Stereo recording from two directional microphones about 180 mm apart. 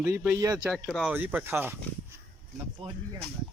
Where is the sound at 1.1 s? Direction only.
10° right (ahead or behind).